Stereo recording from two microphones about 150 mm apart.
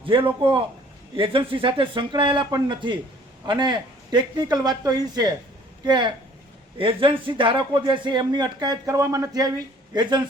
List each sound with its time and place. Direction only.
0.0 s speech: 35° right (ahead or behind)